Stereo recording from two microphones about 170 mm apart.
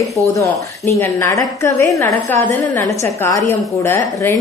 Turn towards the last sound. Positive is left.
turn(degrees=15)  # may be behind; listen again after turning